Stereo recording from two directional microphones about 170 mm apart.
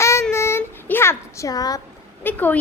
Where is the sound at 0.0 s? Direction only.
15° left (ahead or behind).